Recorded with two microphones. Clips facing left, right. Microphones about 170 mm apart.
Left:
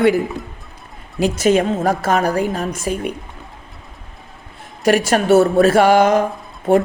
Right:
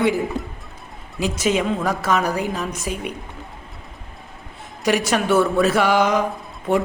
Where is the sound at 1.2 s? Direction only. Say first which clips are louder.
Left 6 dB; 55° left (ahead or behind).